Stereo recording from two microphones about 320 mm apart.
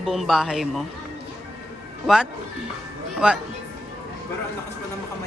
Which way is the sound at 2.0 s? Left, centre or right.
Centre.